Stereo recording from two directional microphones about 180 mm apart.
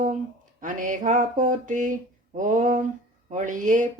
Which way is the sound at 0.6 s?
45° right (ahead or behind).